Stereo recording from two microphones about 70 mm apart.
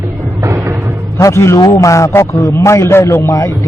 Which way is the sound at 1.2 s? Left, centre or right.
Left.